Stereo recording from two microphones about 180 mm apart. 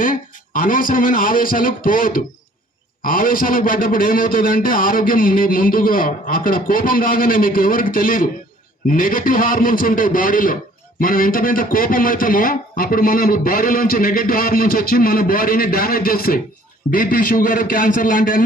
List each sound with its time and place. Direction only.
0.0 s speech: 50° left (ahead or behind)